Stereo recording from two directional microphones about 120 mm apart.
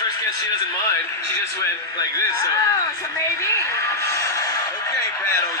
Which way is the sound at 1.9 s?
30° left (ahead or behind).